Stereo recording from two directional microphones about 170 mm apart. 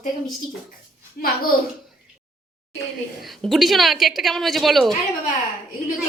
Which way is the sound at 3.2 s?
Centre (ahead or behind).